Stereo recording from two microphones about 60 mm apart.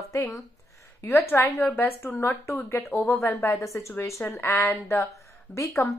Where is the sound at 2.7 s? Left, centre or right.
Left.